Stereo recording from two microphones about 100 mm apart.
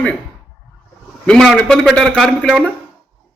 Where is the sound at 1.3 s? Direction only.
5° left (ahead or behind).